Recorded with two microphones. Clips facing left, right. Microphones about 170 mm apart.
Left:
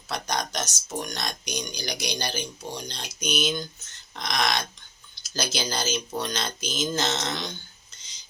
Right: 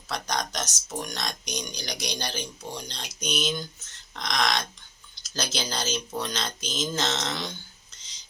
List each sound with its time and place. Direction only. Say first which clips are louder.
0.1 s speech: left 1 dB; centre (ahead or behind)